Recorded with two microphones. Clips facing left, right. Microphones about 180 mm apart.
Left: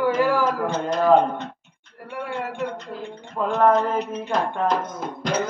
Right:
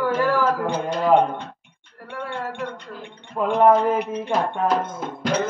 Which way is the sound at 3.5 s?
10° right (ahead or behind).